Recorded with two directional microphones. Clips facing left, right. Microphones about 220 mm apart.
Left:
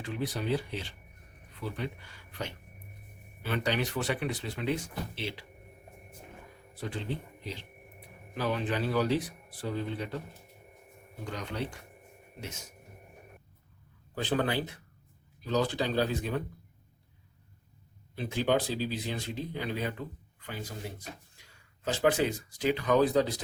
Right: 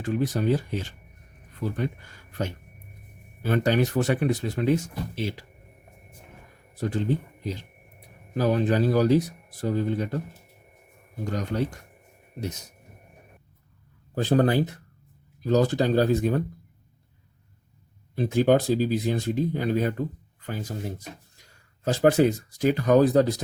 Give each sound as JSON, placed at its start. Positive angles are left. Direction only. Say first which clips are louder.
{"t": 0.0, "sound": "speech", "louder": "right 9 dB", "side_deg": -45}
{"t": 6.7, "sound": "speech", "louder": "right 10 dB", "side_deg": -45}
{"t": 11.3, "sound": "speech", "louder": "right 8 dB", "side_deg": -45}
{"t": 14.2, "sound": "speech", "louder": "right 8 dB", "side_deg": -45}
{"t": 18.1, "sound": "speech", "louder": "right 8 dB", "side_deg": -45}